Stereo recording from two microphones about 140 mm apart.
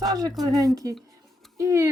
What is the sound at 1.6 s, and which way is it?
Speech, 20° right (ahead or behind).